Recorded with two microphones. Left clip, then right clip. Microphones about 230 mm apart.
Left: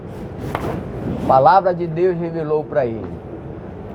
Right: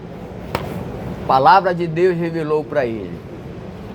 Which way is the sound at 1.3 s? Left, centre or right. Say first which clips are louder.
Even; right.